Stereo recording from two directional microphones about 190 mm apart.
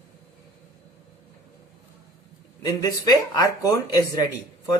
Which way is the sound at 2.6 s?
15° left (ahead or behind).